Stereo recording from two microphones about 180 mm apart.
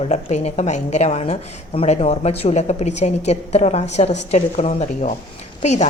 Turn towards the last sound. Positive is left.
turn(degrees=40)  # may be behind; listen again after turning